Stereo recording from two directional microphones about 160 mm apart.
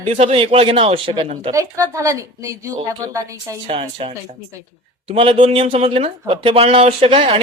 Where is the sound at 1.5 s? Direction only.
20° right (ahead or behind).